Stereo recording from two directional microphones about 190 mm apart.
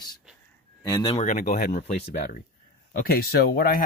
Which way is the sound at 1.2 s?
40° left (ahead or behind).